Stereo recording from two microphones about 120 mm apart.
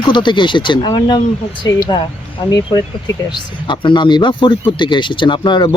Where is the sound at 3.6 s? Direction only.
40° left (ahead or behind).